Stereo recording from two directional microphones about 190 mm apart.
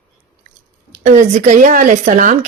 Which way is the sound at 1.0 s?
40° right (ahead or behind).